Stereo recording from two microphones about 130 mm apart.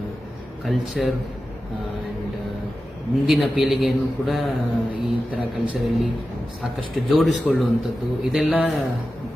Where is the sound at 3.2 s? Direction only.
Centre (ahead or behind).